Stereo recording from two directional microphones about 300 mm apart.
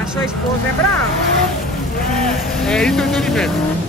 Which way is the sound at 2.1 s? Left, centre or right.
Centre.